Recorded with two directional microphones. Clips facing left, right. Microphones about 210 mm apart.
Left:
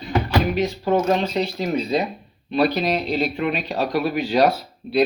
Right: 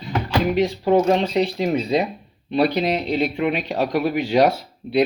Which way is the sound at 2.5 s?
25° right (ahead or behind).